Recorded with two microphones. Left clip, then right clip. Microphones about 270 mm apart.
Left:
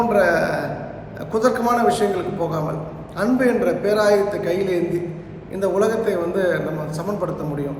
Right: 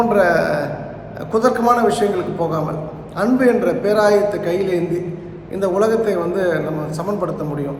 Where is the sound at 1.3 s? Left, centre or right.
Centre.